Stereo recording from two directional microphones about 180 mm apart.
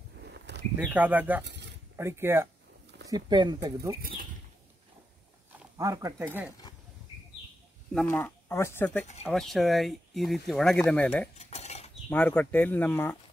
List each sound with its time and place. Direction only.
0.2 s a sound: 70° right (ahead or behind)
0.7 s speech: 10° right (ahead or behind)
1.4 s a sound: 75° right (ahead or behind)
2.0 s speech: 15° right (ahead or behind)
3.1 s speech: 25° right (ahead or behind)
5.8 s speech: 20° right (ahead or behind)
7.9 s speech: 10° left (ahead or behind)
11.3 s cutlery: 35° left (ahead or behind)
12.1 s speech: 10° left (ahead or behind)